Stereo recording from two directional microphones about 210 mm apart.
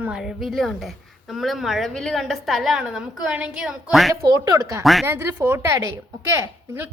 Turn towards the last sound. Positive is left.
turn(degrees=-10)  # may be behind; listen again after turning